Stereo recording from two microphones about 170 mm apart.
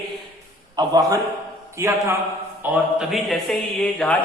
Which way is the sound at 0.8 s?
25° right (ahead or behind).